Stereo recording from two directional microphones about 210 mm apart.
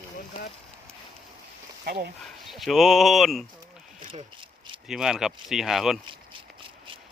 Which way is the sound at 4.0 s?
25° right (ahead or behind).